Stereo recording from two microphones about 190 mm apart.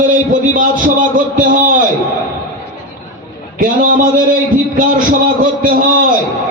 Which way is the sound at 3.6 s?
45° right (ahead or behind).